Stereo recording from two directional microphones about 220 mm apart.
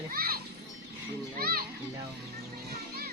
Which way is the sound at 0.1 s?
45° right (ahead or behind).